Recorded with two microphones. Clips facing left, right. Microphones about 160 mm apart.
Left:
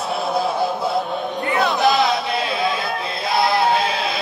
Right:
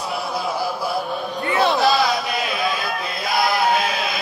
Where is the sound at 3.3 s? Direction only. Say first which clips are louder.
Left 2 dB; 25° left (ahead or behind).